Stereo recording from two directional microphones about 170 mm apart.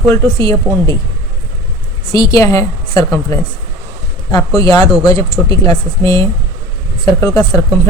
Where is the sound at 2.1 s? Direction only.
20° left (ahead or behind).